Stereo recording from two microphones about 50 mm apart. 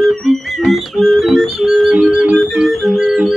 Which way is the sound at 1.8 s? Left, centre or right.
Centre.